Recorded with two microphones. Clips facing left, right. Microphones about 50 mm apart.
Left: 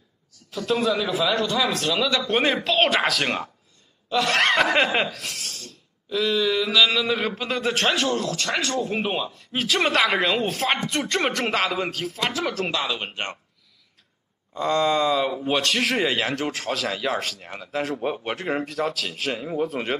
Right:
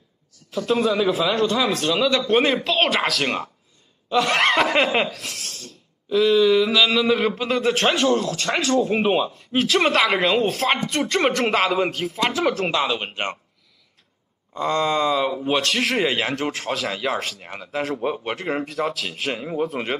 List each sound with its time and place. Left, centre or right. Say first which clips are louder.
0.5 s speech: right 2 dB; centre
4.1 s laughter: right 2 dB; centre
6.0 s speech: right 6 dB; centre
12.7 s speech: right 4 dB; centre
14.5 s speech: even; centre